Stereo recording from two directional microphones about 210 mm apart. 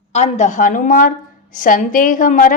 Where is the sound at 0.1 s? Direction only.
35° left (ahead or behind).